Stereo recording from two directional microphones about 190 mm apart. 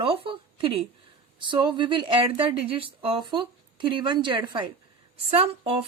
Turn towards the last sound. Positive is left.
turn(degrees=-30)  # may be behind; listen again after turning